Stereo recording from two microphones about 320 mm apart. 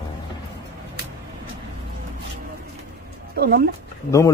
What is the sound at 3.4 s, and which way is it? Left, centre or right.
Speech, right.